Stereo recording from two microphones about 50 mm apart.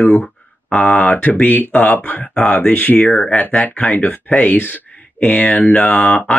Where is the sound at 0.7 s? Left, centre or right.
Left.